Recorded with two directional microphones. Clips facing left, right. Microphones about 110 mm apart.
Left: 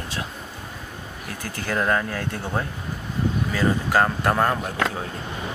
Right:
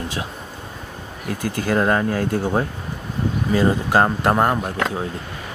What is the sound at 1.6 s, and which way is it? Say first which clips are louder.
Speech: right 4 dB; 25° right (ahead or behind).